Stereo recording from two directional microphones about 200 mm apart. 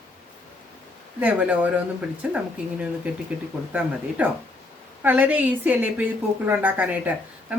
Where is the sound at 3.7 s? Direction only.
5° right (ahead or behind).